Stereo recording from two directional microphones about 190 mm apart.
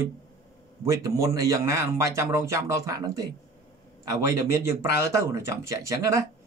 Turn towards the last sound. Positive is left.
turn(degrees=-15)  # may be behind; listen again after turning